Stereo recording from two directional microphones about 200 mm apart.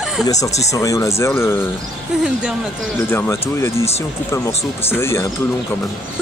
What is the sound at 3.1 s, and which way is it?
Speech, 10° left (ahead or behind).